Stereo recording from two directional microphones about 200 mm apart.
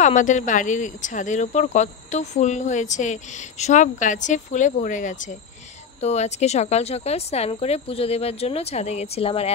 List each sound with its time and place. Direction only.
0.0 s speech: 40° left (ahead or behind)